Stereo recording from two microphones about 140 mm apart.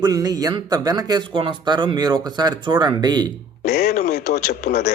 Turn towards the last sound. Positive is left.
turn(degrees=60)  # may be behind; listen again after turning